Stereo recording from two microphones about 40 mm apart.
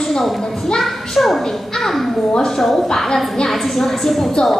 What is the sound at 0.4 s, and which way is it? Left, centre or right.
Speech, centre.